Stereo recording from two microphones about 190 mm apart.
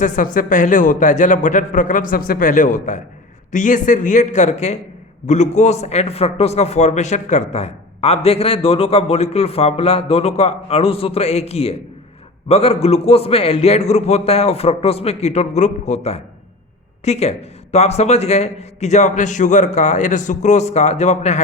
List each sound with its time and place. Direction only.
0.0 s a man's voice: 40° left (ahead or behind)